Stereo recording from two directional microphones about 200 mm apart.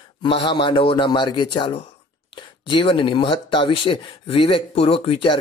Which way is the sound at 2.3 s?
25° left (ahead or behind).